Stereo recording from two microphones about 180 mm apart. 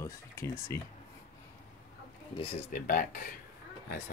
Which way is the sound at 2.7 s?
50° left (ahead or behind).